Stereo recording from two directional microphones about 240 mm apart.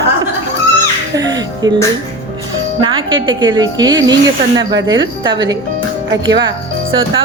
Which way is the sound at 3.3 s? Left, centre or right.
Centre.